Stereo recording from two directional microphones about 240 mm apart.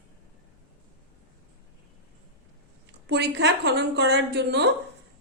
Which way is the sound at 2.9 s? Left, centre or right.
Right.